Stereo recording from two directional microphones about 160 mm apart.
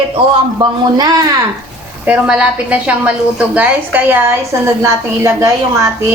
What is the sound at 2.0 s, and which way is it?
A woman's voice, 5° right (ahead or behind).